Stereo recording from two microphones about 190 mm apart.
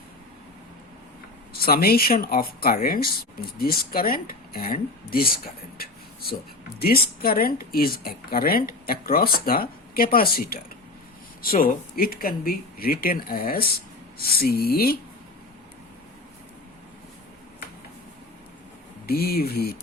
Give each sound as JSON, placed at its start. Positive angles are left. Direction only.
{"t": 1.5, "sound": "speech", "side_deg": 55}
{"t": 5.7, "sound": "a sound", "side_deg": 55}
{"t": 6.7, "sound": "speech", "side_deg": 55}
{"t": 19.0, "sound": "speech", "side_deg": 55}